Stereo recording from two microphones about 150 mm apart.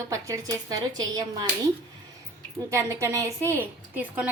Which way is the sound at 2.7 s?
20° right (ahead or behind).